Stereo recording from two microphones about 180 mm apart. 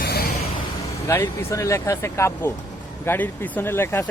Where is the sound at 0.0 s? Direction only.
60° left (ahead or behind).